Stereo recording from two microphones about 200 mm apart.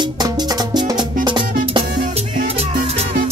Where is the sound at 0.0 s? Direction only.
20° right (ahead or behind).